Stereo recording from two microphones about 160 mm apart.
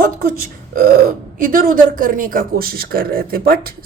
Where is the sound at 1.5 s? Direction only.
60° right (ahead or behind).